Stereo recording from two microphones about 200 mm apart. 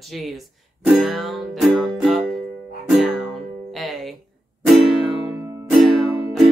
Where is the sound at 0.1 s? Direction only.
Centre (ahead or behind).